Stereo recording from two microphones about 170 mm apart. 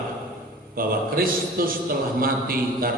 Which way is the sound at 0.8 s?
60° right (ahead or behind).